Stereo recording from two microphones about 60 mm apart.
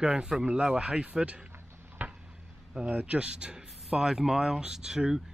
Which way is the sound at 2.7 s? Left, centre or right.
Centre.